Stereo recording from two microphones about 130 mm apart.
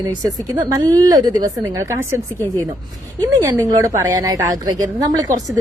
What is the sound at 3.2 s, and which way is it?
A woman's voice, 30° right (ahead or behind).